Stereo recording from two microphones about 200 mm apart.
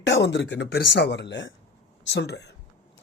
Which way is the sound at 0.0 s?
60° left (ahead or behind).